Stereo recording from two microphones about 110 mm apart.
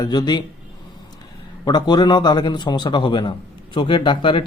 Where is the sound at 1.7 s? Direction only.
40° left (ahead or behind).